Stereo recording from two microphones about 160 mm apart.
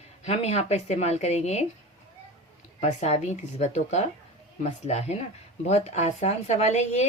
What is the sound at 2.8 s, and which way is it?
Speech, 45° left (ahead or behind).